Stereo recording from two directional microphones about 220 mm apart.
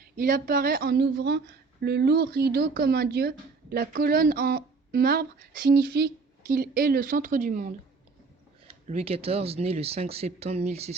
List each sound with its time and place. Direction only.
0.2 s speech: 40° right (ahead or behind)
8.6 s speech: 25° right (ahead or behind)